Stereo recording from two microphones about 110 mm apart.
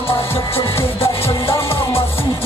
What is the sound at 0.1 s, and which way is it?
Music, 60° left (ahead or behind).